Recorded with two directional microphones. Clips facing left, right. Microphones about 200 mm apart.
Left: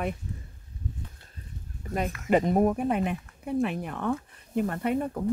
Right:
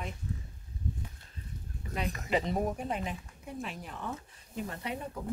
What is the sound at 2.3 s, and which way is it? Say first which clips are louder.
Speech: left 9 dB; 50° left (ahead or behind).